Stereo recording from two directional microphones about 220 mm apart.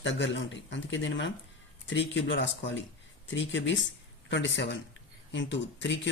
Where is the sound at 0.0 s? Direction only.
55° left (ahead or behind).